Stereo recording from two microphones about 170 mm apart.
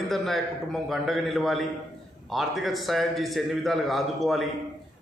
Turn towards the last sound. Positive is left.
turn(degrees=0)  # may be behind; listen again after turning